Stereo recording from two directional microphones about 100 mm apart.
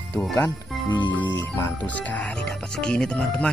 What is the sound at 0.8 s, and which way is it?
Speech, 50° left (ahead or behind).